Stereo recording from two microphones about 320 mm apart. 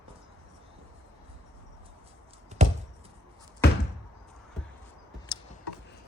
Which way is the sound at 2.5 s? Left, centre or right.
Right.